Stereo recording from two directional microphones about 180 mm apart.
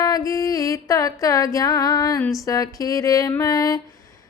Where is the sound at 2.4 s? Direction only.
20° left (ahead or behind).